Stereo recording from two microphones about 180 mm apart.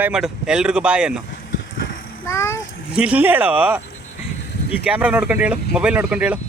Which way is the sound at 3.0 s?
10° right (ahead or behind).